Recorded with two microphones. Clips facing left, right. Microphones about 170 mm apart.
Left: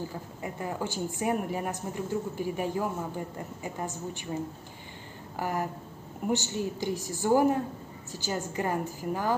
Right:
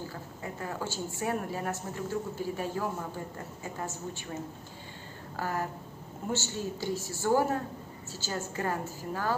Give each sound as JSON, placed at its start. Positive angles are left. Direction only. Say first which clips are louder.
{"t": 0.1, "sound": "a woman's voice", "louder": "left 2 dB", "side_deg": 15}
{"t": 5.4, "sound": "a woman's voice", "louder": "left 2 dB", "side_deg": 15}